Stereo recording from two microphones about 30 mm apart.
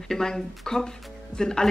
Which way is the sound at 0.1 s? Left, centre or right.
Centre.